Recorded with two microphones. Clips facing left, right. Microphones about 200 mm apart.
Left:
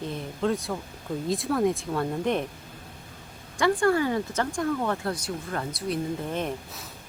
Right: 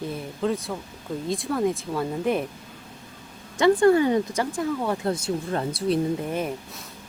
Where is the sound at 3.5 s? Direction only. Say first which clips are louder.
Right 5 dB; 20° right (ahead or behind); by 5.0 s 5° right (ahead or behind).